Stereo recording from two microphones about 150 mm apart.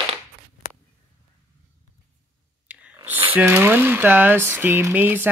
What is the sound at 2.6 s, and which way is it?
Speech, 10° right (ahead or behind).